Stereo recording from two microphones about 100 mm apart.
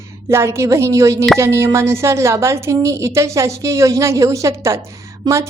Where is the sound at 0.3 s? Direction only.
25° right (ahead or behind).